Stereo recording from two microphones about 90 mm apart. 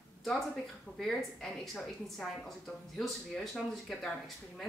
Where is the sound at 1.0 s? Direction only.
5° left (ahead or behind).